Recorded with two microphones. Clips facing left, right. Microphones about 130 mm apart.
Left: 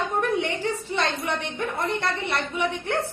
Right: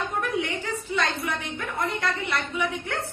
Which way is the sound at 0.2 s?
30° left (ahead or behind).